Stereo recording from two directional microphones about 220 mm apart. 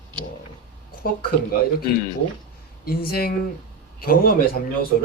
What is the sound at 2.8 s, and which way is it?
A man's voice, 40° left (ahead or behind).